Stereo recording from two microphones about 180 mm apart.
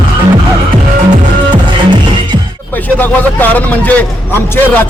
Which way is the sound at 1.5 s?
25° right (ahead or behind).